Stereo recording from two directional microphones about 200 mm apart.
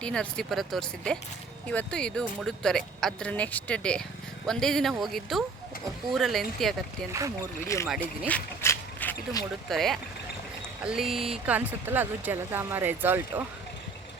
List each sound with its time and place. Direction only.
0.0 s speech: 5° left (ahead or behind)
7.1 s speech: 15° right (ahead or behind)
8.3 s speech: 10° left (ahead or behind)
11.1 s speech: centre (ahead or behind)